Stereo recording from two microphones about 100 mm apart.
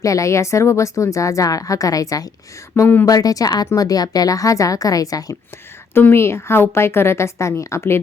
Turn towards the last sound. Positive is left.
turn(degrees=25)  # may be behind; listen again after turning